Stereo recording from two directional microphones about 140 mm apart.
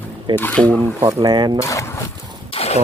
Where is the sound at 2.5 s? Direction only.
45° left (ahead or behind).